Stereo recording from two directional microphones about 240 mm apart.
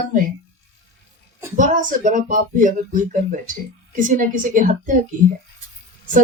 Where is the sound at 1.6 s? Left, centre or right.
Right.